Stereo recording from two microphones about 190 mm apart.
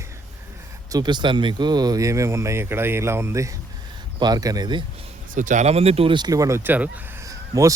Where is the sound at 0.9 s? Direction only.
20° right (ahead or behind).